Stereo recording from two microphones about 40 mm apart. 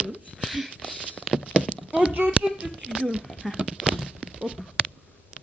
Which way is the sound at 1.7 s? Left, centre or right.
Right.